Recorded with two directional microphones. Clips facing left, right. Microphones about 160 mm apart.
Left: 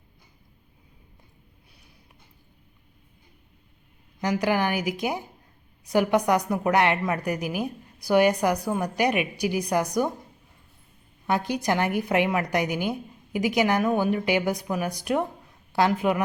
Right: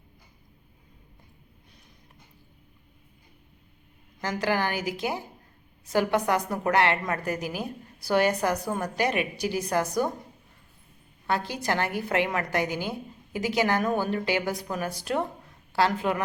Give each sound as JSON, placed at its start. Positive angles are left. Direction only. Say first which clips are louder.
{"t": 4.2, "sound": "a woman's voice", "louder": "left 3 dB", "side_deg": 15}
{"t": 11.3, "sound": "a woman's voice", "louder": "left 3 dB", "side_deg": 15}